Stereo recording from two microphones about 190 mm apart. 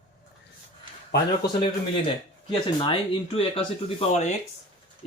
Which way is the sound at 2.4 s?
30° left (ahead or behind).